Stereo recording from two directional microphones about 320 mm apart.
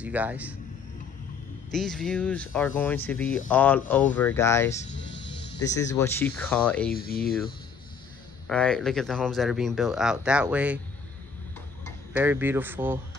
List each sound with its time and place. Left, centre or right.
0.0 s speech: centre
1.7 s speech: centre
4.9 s music: left
5.6 s speech: centre
6.9 s speech: left
8.5 s speech: centre
12.1 s a man's voice: centre